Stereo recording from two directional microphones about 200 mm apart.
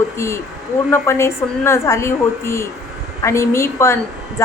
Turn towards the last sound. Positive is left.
turn(degrees=15)  # may be behind; listen again after turning